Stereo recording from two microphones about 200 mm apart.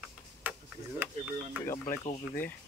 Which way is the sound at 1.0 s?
10° right (ahead or behind).